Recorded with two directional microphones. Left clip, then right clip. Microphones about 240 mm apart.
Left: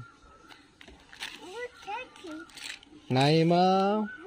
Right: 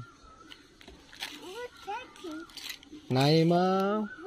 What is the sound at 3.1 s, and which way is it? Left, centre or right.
Speech, centre.